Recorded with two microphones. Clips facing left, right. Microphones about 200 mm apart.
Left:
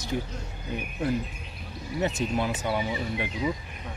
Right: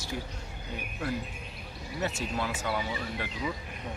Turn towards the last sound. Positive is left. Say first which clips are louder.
# left 5 dB
turn(degrees=20)  # may be behind; listen again after turning